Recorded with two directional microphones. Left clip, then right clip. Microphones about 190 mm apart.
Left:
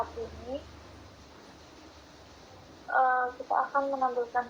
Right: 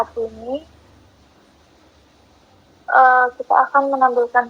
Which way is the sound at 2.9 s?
55° right (ahead or behind).